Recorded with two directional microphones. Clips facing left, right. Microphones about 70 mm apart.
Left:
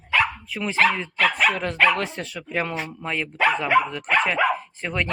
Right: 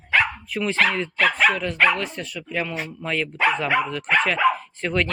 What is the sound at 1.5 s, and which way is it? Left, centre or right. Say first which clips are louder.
Speech: even; left.